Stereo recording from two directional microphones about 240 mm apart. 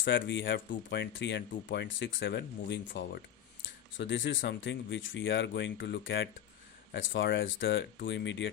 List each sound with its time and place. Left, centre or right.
0.0 s speech: left